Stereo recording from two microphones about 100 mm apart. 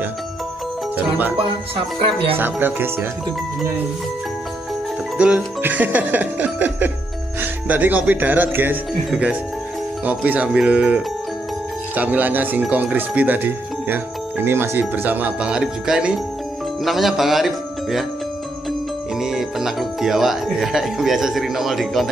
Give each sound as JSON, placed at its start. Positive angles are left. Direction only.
{"t": 0.9, "sound": "speech", "side_deg": -15}
{"t": 2.0, "sound": "speech", "side_deg": -65}
{"t": 2.3, "sound": "speech", "side_deg": -20}
{"t": 5.1, "sound": "speech", "side_deg": -10}
{"t": 18.7, "sound": "speech", "side_deg": -5}